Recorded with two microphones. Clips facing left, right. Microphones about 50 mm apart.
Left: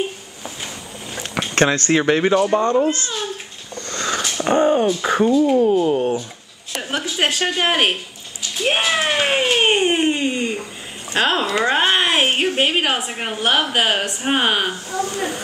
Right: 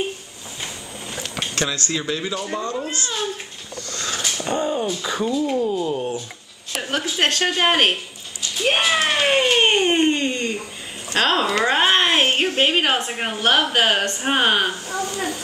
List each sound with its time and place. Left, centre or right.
1.5 s speech: left
2.5 s speech: left
3.9 s a sound: left
4.4 s speech: left
7.2 s a woman's voice: centre
9.8 s a sound: centre
11.1 s a woman's voice: centre